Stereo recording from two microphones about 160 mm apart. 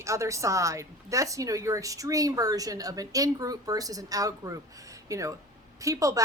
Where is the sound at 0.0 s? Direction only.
20° right (ahead or behind).